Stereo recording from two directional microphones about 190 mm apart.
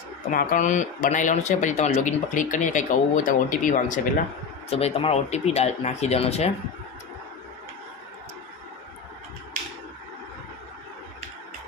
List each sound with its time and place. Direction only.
0.3 s speech: 45° left (ahead or behind)
4.7 s speech: 30° left (ahead or behind)